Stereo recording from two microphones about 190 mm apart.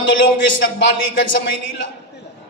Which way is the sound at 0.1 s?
75° left (ahead or behind).